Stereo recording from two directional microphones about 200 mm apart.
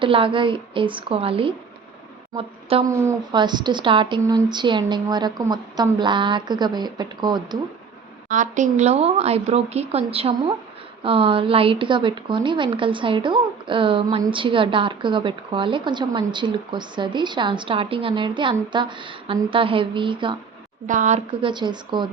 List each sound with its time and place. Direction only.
0.0 s a woman's voice: 25° right (ahead or behind)
2.9 s speech: 15° right (ahead or behind)
8.3 s speech: 40° right (ahead or behind)
20.8 s speech: 40° right (ahead or behind)
21.4 s speech: 20° right (ahead or behind)